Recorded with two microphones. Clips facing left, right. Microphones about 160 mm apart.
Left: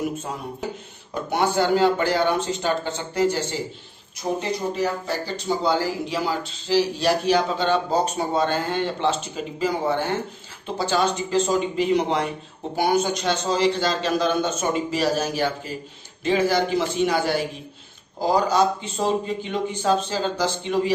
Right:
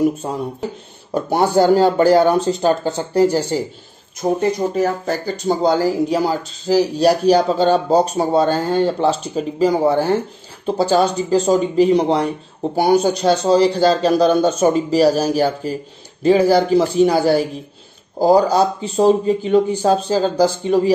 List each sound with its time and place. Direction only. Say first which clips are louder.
1.1 s speech: right 7 dB; 35° right (ahead or behind)
4.2 s speech: right 8 dB; 50° right (ahead or behind)